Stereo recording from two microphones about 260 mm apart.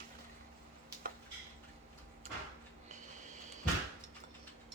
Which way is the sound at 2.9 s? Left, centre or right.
Right.